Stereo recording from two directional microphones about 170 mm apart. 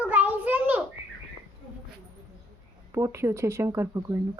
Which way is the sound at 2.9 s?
15° right (ahead or behind).